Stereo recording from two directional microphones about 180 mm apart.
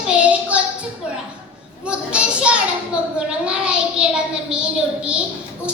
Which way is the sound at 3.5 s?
5° right (ahead or behind).